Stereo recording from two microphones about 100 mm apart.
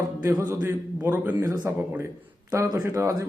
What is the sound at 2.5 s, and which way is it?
Speech, 30° right (ahead or behind).